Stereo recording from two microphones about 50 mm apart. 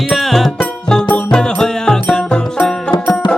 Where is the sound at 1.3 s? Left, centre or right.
Centre.